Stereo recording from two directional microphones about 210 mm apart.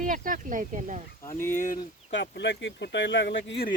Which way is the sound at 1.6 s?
40° left (ahead or behind).